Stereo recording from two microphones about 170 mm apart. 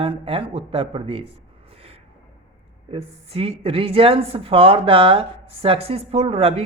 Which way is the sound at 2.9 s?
35° right (ahead or behind).